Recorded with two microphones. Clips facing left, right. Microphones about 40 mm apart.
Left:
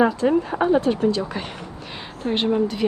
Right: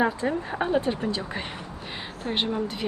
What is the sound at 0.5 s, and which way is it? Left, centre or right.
Speech, centre.